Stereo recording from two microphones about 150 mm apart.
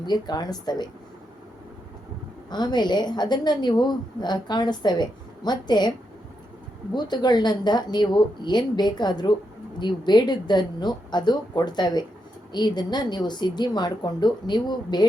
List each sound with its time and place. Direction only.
0.0 s a woman's voice: 30° left (ahead or behind)
2.5 s a woman's voice: 30° left (ahead or behind)
6.9 s a woman's voice: 30° left (ahead or behind)